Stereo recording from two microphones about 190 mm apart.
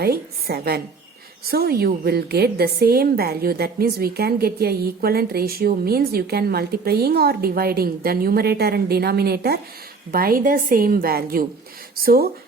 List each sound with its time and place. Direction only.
0.0 s a woman's voice: 55° right (ahead or behind)